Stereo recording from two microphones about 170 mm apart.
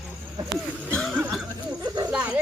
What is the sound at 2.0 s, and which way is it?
Snake, 5° right (ahead or behind).